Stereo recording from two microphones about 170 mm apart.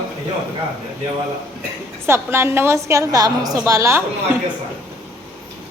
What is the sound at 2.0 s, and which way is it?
A woman's voice, 15° right (ahead or behind).